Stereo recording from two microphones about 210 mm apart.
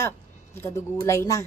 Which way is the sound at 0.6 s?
15° left (ahead or behind).